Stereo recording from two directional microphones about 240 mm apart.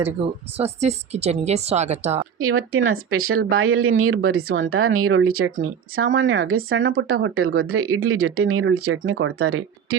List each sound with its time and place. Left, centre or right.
0.5 s speech: right
2.4 s speech: right